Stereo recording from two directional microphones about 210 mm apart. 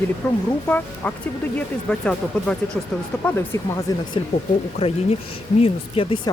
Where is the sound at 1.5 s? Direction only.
5° left (ahead or behind).